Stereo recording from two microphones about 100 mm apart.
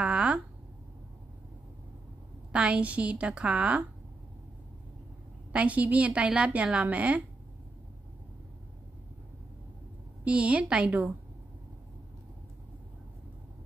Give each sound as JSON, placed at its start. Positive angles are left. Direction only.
{"t": 0.0, "sound": "a sound", "side_deg": -10}
{"t": 2.5, "sound": "a woman's voice", "side_deg": -10}
{"t": 5.5, "sound": "a woman's voice", "side_deg": -15}
{"t": 10.2, "sound": "a woman's voice", "side_deg": -10}